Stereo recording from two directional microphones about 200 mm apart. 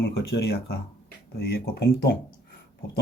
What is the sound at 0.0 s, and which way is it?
Speech, 55° left (ahead or behind).